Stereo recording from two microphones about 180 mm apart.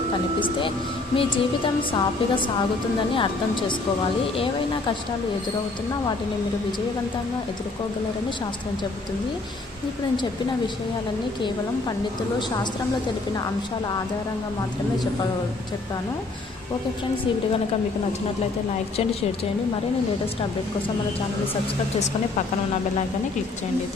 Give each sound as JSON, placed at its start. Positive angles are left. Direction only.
{"t": 1.1, "sound": "a woman's voice", "side_deg": 30}